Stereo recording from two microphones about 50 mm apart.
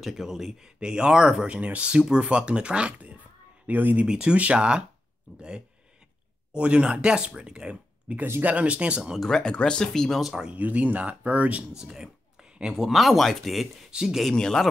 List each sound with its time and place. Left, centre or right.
0.0 s speech: centre
0.7 s speech: centre
1.6 s speech: right
3.6 s speech: right
4.0 s speech: centre
6.5 s speech: right
8.4 s speech: right
9.2 s speech: centre
10.2 s speech: centre
10.5 s speech: right
11.8 s speech: centre
12.8 s speech: centre
13.8 s speech: centre
14.3 s speech: centre